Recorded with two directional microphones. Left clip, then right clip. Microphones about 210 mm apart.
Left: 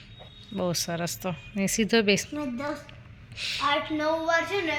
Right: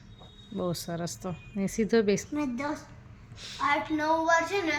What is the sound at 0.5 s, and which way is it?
Speech, centre (ahead or behind).